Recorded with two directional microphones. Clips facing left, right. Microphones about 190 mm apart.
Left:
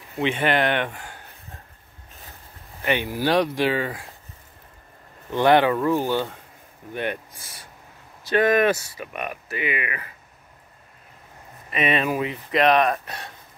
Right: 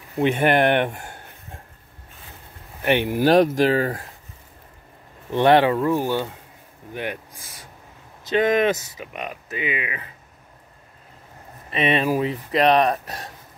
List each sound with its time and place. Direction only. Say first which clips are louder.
0.2 s speech: right 4 dB; 45° right (ahead or behind)
2.8 s speech: right 4 dB; 65° right (ahead or behind)
3.2 s speech: right 6 dB; 45° right (ahead or behind)
5.3 s speech: right 1 dB; 25° right (ahead or behind)
5.9 s speech: even; centre (ahead or behind)
6.9 s speech: left 2 dB; 10° right (ahead or behind)
11.7 s speech: right 2 dB; 30° right (ahead or behind)